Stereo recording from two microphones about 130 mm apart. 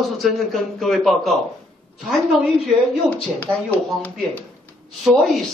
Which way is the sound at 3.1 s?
10° left (ahead or behind).